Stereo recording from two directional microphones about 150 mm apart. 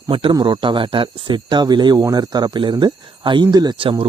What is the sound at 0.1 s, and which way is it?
Speech, 35° right (ahead or behind).